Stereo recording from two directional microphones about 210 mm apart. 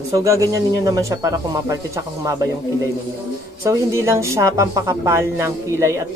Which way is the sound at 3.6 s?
15° right (ahead or behind).